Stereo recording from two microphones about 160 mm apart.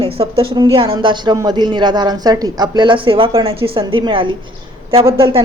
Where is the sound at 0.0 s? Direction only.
35° right (ahead or behind).